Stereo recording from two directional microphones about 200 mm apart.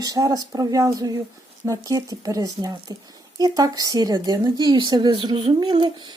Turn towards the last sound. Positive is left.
turn(degrees=-20)  # may be behind; listen again after turning